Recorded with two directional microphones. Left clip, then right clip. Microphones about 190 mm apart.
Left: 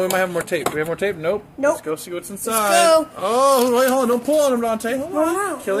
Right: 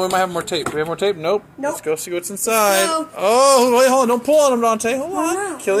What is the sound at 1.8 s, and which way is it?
Speech, 15° right (ahead or behind).